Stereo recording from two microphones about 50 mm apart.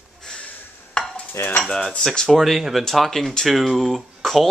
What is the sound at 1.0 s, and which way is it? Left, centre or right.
Stir, centre.